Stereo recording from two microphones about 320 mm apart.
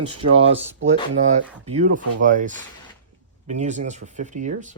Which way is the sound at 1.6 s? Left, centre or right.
Right.